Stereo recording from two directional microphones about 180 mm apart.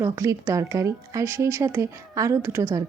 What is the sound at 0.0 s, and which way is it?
Speech, 15° right (ahead or behind).